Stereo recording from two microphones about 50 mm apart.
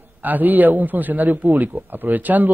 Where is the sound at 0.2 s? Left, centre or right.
Right.